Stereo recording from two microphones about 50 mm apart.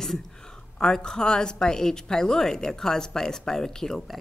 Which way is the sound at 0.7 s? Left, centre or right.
Centre.